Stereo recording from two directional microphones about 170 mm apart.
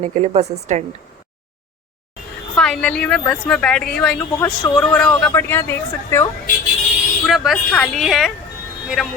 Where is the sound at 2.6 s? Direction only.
5° left (ahead or behind).